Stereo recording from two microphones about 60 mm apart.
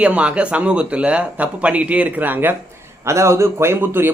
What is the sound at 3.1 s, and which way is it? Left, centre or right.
A man's voice, right.